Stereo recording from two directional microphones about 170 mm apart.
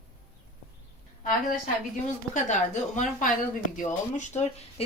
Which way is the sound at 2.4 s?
45° left (ahead or behind).